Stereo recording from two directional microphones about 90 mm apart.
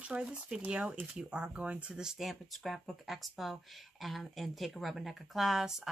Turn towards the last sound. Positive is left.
turn(degrees=-5)  # may be behind; listen again after turning